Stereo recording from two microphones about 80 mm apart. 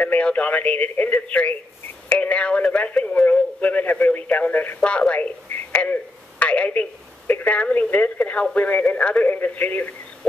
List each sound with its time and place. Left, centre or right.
0.0 s speech: centre
5.5 s telephone: centre
6.4 s speech: centre